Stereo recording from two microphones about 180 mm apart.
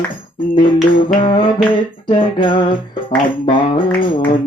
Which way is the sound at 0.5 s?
30° left (ahead or behind).